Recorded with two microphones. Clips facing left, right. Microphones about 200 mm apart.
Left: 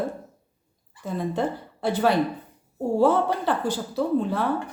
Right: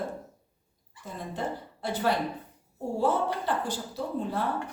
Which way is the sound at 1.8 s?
80° left.